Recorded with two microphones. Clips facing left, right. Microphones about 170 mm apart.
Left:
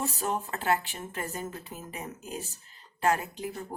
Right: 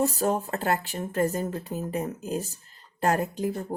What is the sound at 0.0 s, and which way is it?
Speech, 40° right (ahead or behind).